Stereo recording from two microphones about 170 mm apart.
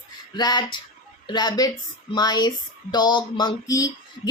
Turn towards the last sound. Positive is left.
turn(degrees=20)  # may be behind; listen again after turning